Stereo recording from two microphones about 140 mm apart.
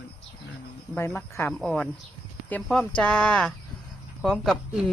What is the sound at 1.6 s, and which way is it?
A woman's voice, 5° left (ahead or behind).